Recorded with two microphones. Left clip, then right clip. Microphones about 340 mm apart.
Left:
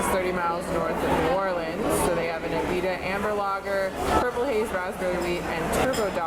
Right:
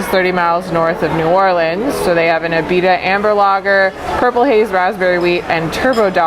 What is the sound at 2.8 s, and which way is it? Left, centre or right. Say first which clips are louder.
Speech: right 15 dB; right.